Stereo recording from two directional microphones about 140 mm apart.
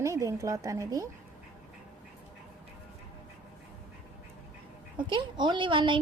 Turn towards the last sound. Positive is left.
turn(degrees=-35)  # may be behind; listen again after turning